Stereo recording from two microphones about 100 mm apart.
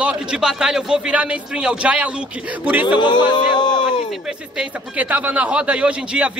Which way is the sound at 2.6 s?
15° right (ahead or behind).